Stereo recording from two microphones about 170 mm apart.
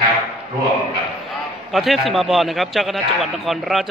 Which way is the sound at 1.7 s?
Centre (ahead or behind).